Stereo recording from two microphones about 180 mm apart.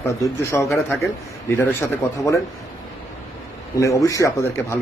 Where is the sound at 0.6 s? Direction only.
Centre (ahead or behind).